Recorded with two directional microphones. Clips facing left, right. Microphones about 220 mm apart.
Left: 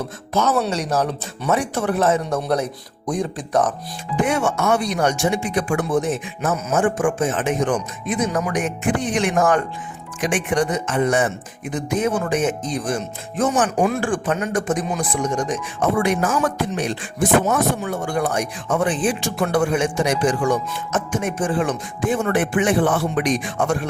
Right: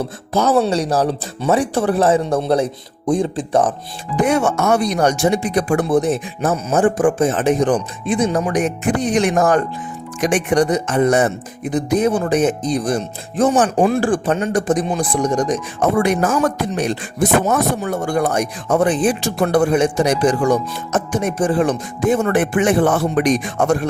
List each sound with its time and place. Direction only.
0.0 s speech: 30° right (ahead or behind)
4.2 s speech: 40° right (ahead or behind)